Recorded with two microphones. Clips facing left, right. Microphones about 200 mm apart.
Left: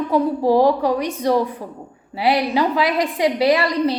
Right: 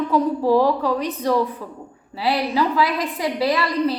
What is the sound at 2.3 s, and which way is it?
A woman's voice, 70° left (ahead or behind).